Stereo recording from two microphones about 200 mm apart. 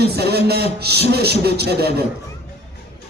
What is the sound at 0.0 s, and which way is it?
A man's voice, 55° right (ahead or behind).